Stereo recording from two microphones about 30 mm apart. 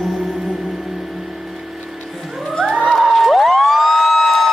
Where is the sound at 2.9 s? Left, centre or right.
Centre.